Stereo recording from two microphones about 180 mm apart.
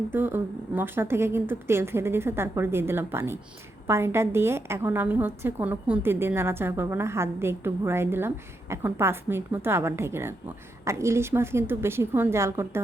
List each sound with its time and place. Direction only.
0.1 s a woman's voice: 10° right (ahead or behind)